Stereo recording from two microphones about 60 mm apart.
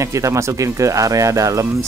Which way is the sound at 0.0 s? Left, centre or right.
Right.